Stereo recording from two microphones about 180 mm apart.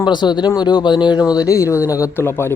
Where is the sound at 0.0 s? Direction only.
25° left (ahead or behind).